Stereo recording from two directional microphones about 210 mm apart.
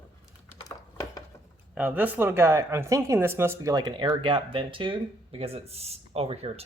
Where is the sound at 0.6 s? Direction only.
15° left (ahead or behind).